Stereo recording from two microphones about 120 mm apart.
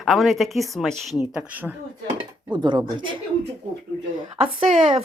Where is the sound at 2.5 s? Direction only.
40° right (ahead or behind).